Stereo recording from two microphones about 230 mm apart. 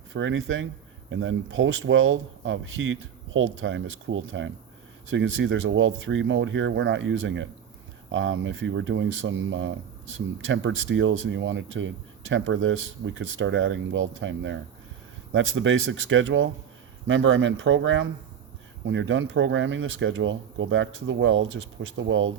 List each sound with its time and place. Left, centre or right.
0.1 s speech: right